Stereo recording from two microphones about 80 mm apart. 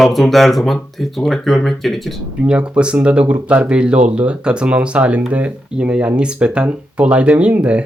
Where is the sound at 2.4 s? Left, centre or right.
Centre.